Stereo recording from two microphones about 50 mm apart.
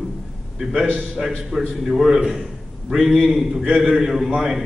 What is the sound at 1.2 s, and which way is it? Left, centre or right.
Speech, centre.